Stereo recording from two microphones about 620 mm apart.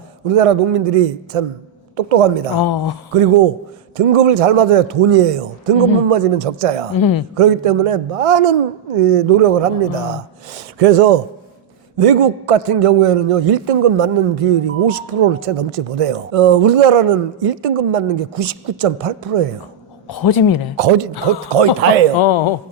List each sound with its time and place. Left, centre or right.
0.3 s a man's voice: right
2.6 s speech: left
3.1 s a man's voice: right
6.9 s speech: left
7.3 s a man's voice: right
11.9 s a man's voice: right
20.1 s speech: left
21.8 s speech: right
22.2 s speech: left